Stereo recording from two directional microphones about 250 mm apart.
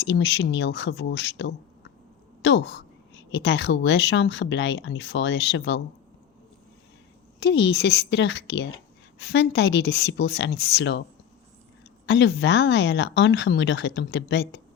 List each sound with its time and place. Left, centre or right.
0.0 s a woman's voice: left
7.3 s a woman's voice: left
12.0 s a woman's voice: left